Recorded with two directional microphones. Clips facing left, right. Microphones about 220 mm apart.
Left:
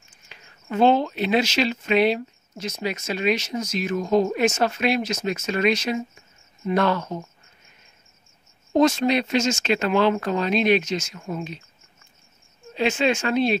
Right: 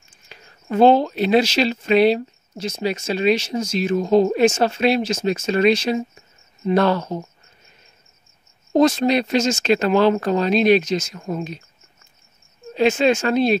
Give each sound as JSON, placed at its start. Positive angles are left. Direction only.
{"t": 0.3, "sound": "speech", "side_deg": -40}
{"t": 8.7, "sound": "speech", "side_deg": -35}
{"t": 12.7, "sound": "speech", "side_deg": -40}